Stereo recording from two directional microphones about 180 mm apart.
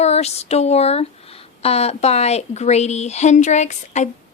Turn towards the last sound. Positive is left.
turn(degrees=40)  # may be behind; listen again after turning